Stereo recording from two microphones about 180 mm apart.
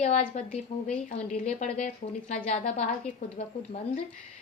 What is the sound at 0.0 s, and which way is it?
A woman's voice, 40° left (ahead or behind).